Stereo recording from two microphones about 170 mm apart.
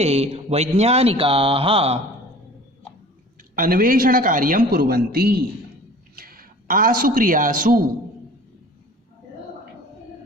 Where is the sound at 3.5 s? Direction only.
55° right (ahead or behind).